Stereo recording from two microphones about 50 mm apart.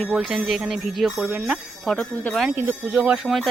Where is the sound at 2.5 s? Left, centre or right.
Right.